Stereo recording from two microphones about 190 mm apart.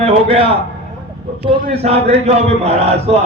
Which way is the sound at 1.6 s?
35° right (ahead or behind).